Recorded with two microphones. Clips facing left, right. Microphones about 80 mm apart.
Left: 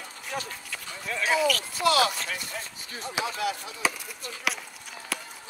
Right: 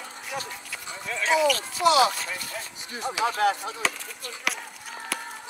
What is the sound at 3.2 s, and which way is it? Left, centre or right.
Speech, right.